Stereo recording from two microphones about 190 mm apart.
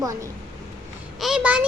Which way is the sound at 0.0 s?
15° right (ahead or behind).